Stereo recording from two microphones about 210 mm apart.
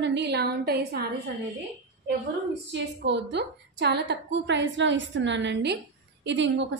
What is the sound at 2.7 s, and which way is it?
A woman's voice, 55° right (ahead or behind).